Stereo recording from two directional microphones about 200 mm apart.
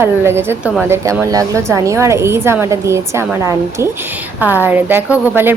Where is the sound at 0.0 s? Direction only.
10° right (ahead or behind).